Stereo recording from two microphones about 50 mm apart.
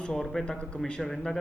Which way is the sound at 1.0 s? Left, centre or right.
Centre.